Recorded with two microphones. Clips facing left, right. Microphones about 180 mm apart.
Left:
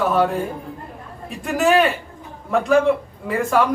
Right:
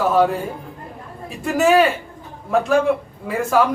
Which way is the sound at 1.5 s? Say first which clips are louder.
Right 2 dB; centre (ahead or behind).